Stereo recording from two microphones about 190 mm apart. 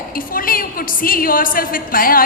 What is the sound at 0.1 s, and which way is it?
A woman's voice, 50° left (ahead or behind).